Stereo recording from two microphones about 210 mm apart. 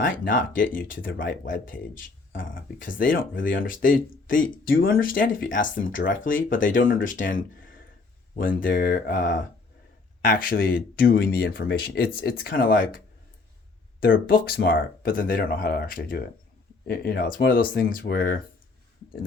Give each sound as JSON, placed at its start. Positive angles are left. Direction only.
{"t": 0.0, "sound": "speech", "side_deg": 40}
{"t": 14.0, "sound": "speech", "side_deg": 45}